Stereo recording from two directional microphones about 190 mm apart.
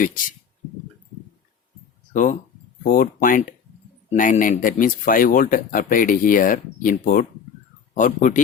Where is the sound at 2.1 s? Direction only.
40° left (ahead or behind).